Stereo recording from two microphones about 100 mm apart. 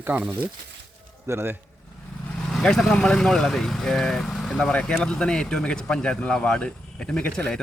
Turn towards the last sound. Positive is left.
turn(degrees=10)  # may be behind; listen again after turning